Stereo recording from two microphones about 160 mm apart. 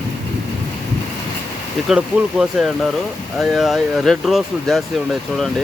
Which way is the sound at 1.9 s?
5° right (ahead or behind).